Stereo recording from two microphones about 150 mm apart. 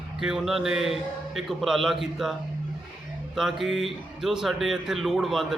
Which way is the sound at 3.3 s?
Centre (ahead or behind).